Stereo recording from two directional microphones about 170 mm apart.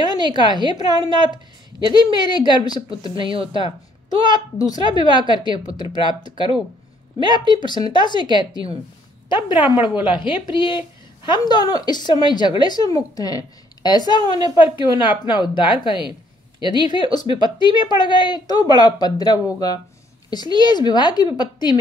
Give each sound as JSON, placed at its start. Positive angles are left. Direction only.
{"t": 0.4, "sound": "speech", "side_deg": -25}
{"t": 0.7, "sound": "a woman's voice", "side_deg": 25}
{"t": 3.2, "sound": "speech", "side_deg": -30}
{"t": 4.2, "sound": "a woman's voice", "side_deg": 25}
{"t": 4.8, "sound": "speech", "side_deg": -30}
{"t": 7.9, "sound": "a woman's voice", "side_deg": 25}
{"t": 8.2, "sound": "speech", "side_deg": -25}
{"t": 9.3, "sound": "a woman's voice", "side_deg": 30}